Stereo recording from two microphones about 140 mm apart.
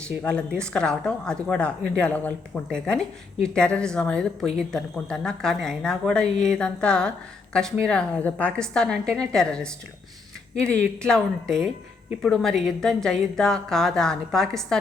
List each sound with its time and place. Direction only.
0.2 s a woman's voice: 10° left (ahead or behind)